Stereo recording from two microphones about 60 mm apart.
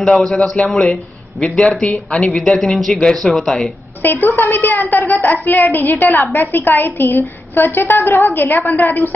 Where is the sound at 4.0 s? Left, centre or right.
Left.